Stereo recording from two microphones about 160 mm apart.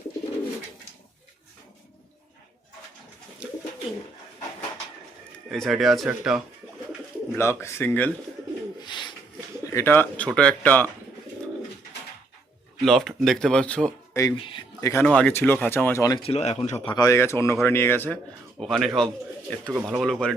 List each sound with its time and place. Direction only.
3.4 s bird: 5° right (ahead or behind)
5.5 s speech: centre (ahead or behind)
7.3 s a man's voice: 15° left (ahead or behind)
8.8 s bird: 30° left (ahead or behind)
9.6 s a man's voice: 15° left (ahead or behind)
12.8 s speech: centre (ahead or behind)
14.1 s speech: 20° left (ahead or behind)
15.0 s a man's voice: 5° left (ahead or behind)
16.2 s speech: 40° left (ahead or behind)
16.9 s a man's voice: 20° left (ahead or behind)
18.6 s a man's voice: centre (ahead or behind)